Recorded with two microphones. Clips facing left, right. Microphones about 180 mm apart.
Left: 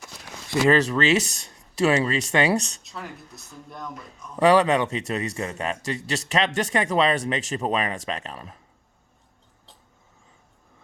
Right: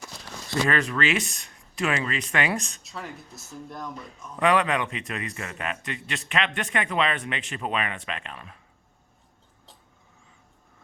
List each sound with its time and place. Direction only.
0.7 s a man's voice: 35° left (ahead or behind)
2.8 s speech: centre (ahead or behind)
4.4 s a man's voice: 35° left (ahead or behind)